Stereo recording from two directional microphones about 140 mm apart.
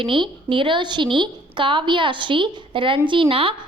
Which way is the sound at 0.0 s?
35° right (ahead or behind).